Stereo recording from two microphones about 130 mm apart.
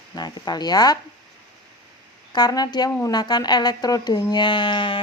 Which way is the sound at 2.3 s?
30° left (ahead or behind).